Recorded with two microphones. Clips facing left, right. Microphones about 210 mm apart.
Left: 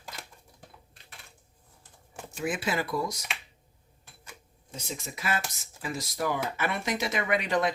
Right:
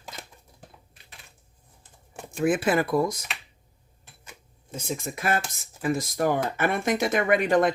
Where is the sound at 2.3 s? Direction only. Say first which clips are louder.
Right 8 dB; 50° right (ahead or behind).